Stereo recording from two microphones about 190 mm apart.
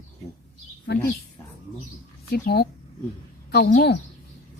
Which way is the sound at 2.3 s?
55° left (ahead or behind).